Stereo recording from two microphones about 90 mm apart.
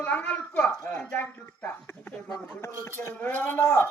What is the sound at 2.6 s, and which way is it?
Speech, 30° left (ahead or behind).